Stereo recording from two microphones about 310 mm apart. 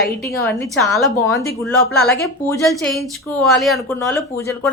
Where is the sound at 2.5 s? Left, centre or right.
Centre.